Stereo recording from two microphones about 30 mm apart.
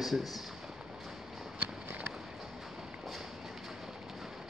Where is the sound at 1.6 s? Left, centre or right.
Right.